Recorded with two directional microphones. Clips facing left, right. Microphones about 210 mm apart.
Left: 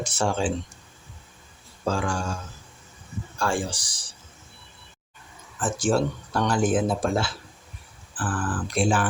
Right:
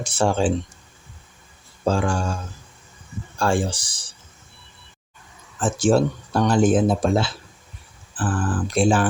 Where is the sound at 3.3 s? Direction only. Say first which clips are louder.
Right 5 dB; 25° right (ahead or behind).